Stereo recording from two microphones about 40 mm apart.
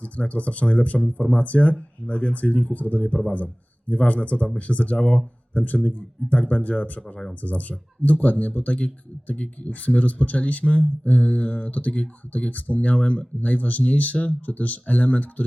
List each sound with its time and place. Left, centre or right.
0.0 s speech: left
4.9 s speech: left
5.5 s speech: left